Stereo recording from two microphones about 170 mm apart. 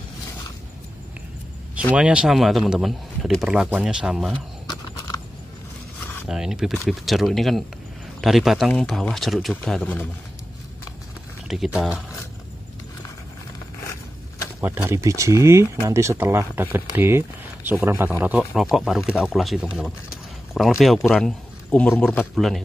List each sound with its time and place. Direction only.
2.0 s a man's voice: 5° right (ahead or behind)
6.2 s a man's voice: 5° right (ahead or behind)
11.4 s a man's voice: 5° right (ahead or behind)
14.6 s a man's voice: 15° right (ahead or behind)